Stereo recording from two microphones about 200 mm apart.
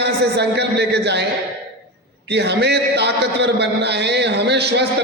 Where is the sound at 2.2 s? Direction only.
55° right (ahead or behind).